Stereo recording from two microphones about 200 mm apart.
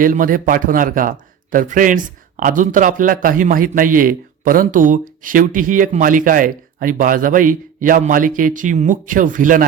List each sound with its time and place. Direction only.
0.0 s a man's voice: 45° right (ahead or behind)